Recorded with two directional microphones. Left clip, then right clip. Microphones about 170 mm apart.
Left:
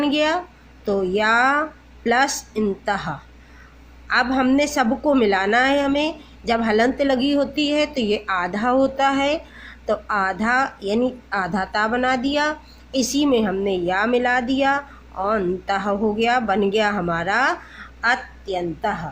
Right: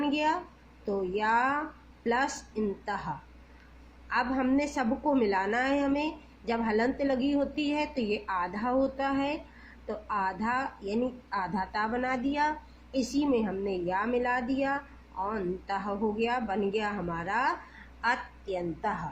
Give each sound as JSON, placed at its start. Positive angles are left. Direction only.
{"t": 0.0, "sound": "a woman's voice", "side_deg": 35}
{"t": 18.0, "sound": "a woman's voice", "side_deg": 20}